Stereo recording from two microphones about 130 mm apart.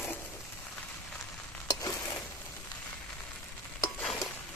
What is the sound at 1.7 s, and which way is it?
Stir, 25° left (ahead or behind).